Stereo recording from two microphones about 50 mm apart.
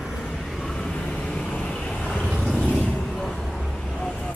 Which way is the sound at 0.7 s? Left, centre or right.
Centre.